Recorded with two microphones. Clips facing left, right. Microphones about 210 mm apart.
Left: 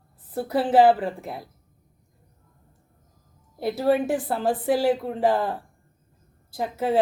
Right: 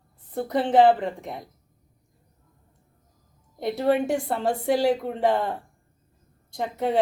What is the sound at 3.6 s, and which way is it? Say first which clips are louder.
A woman's voice: left 1 dB; 5° left (ahead or behind).